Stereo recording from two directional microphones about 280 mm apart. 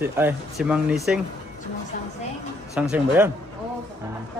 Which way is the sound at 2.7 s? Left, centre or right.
Centre.